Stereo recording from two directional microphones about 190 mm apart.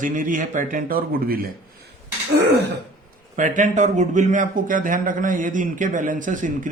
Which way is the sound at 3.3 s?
40° right (ahead or behind).